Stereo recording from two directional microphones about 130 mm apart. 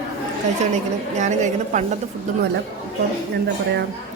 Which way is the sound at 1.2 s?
70° right (ahead or behind).